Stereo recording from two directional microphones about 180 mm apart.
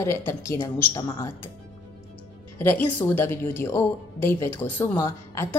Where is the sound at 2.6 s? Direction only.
10° left (ahead or behind).